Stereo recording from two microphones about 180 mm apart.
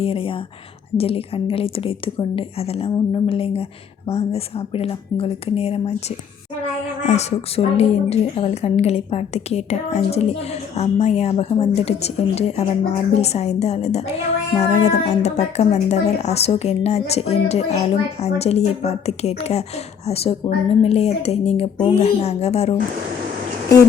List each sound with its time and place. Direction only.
0.0 s a woman's voice: 30° left (ahead or behind)
7.0 s a woman's voice: 40° left (ahead or behind)